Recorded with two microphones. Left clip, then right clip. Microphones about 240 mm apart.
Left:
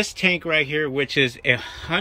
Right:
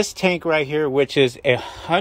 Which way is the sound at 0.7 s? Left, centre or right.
Right.